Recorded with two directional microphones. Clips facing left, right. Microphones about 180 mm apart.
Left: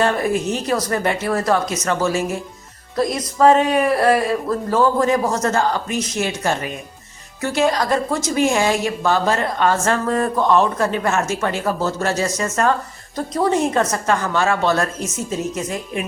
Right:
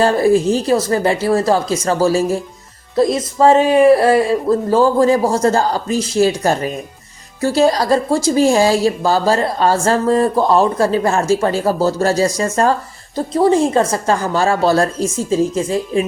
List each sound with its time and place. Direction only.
0.0 s a woman's voice: 30° right (ahead or behind)